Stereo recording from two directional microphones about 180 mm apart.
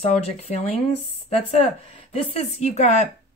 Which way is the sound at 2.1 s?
35° left (ahead or behind).